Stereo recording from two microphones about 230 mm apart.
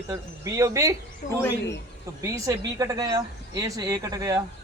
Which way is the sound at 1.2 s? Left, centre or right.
Left.